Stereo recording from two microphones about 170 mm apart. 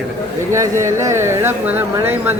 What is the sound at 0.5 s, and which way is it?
Speech, 15° right (ahead or behind).